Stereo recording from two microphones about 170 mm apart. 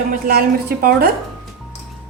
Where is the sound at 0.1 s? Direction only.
60° right (ahead or behind).